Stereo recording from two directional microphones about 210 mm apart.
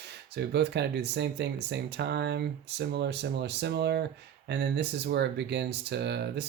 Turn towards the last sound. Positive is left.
turn(degrees=-55)  # may be behind; listen again after turning